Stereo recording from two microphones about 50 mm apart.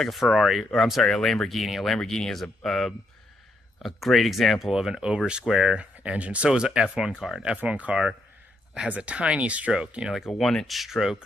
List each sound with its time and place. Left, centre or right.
0.0 s speech: centre
1.0 s speech: centre
5.8 s speech: right
10.1 s speech: centre